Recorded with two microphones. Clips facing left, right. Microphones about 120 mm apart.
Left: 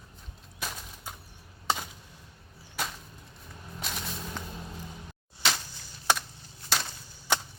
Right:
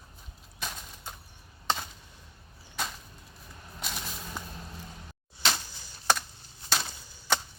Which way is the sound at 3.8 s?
Centre (ahead or behind).